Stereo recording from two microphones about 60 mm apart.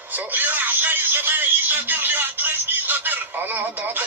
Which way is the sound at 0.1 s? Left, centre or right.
Right.